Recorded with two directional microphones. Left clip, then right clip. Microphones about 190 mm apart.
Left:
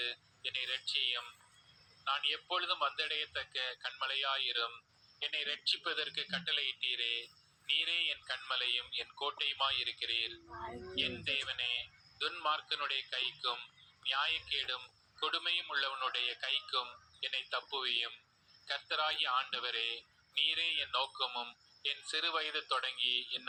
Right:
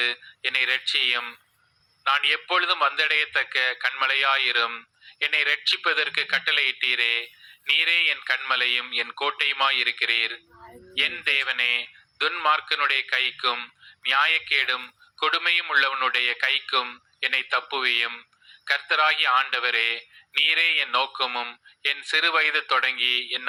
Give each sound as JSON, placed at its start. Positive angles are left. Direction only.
{"t": 0.0, "sound": "a man's voice", "side_deg": -45}